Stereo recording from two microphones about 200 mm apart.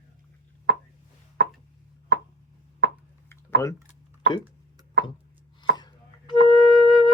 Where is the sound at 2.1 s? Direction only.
55° right (ahead or behind).